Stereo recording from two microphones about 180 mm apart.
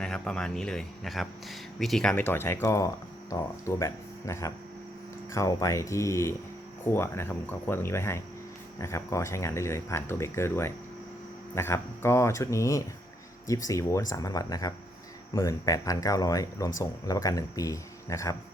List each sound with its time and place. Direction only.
0.0 s speech: 5° left (ahead or behind)